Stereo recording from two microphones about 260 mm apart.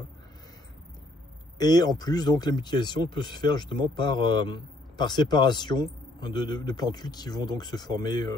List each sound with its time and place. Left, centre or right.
1.6 s speech: centre